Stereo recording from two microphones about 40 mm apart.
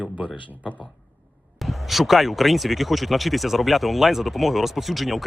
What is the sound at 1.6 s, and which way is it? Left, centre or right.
Speech, centre.